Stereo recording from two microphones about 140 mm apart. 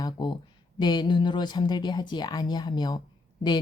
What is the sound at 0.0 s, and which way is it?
Speech, 30° left (ahead or behind).